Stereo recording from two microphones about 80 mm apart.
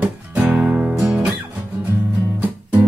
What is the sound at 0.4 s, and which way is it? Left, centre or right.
Music, right.